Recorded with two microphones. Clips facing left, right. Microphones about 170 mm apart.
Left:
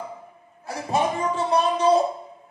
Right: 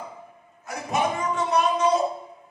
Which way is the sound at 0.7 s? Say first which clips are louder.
Left 2 dB; 30° left (ahead or behind).